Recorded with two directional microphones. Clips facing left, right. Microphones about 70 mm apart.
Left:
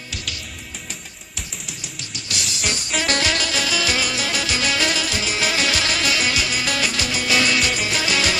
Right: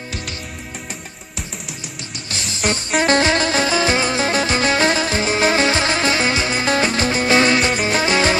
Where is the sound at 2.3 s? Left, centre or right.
Right.